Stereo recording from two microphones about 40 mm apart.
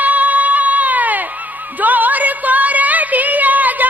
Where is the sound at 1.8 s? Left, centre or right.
Right.